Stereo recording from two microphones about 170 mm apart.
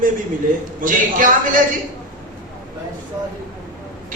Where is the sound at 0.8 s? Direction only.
50° right (ahead or behind).